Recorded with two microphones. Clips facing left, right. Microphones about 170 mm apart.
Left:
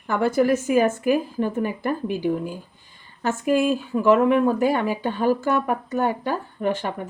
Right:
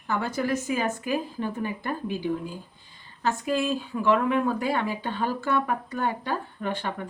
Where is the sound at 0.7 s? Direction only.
45° left (ahead or behind).